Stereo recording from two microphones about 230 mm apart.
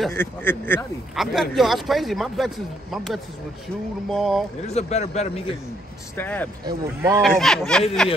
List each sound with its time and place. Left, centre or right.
0.0 s speech: centre
4.6 s speech: left
6.1 s speech: centre
6.6 s speech: centre
7.2 s speech: centre